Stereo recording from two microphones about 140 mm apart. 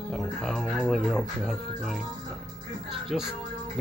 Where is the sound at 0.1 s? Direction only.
Centre (ahead or behind).